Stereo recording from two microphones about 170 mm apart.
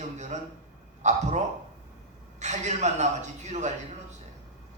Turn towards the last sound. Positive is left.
turn(degrees=-45)  # may be behind; listen again after turning